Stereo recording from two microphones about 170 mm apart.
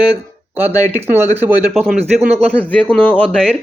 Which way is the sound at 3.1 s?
5° left (ahead or behind).